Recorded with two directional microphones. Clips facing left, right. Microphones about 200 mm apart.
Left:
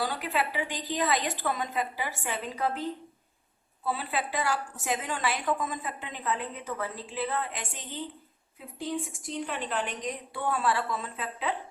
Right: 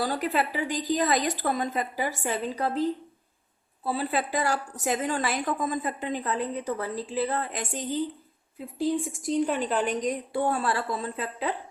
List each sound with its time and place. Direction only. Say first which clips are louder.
0.0 s a woman's voice: right 4 dB; 40° right (ahead or behind)
3.8 s a woman's voice: right 4 dB; 40° right (ahead or behind)